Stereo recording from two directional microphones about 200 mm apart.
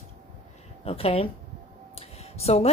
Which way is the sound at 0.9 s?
30° left (ahead or behind).